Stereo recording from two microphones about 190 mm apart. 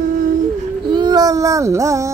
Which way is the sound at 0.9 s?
20° right (ahead or behind).